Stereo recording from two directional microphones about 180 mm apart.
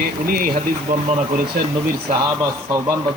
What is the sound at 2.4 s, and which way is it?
Speech, 15° right (ahead or behind).